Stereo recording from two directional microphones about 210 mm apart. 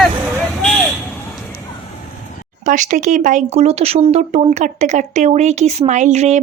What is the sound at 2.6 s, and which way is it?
Speech, 35° right (ahead or behind).